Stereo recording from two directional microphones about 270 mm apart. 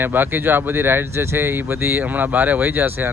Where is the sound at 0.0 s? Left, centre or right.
Centre.